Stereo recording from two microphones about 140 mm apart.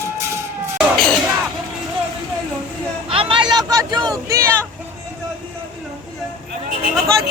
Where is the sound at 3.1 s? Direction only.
40° right (ahead or behind); by 4.5 s 20° right (ahead or behind).